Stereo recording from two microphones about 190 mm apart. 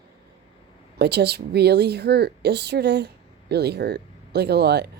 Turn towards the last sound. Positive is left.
turn(degrees=-60)  # may be behind; listen again after turning